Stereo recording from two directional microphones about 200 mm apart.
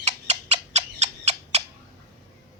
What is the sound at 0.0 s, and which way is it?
Frog, 35° right (ahead or behind).